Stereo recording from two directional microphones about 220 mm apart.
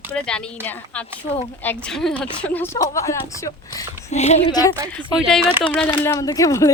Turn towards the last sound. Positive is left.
turn(degrees=15)  # may be behind; listen again after turning